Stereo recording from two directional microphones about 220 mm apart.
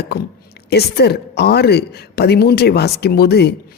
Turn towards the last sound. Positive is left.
turn(degrees=45)  # may be behind; listen again after turning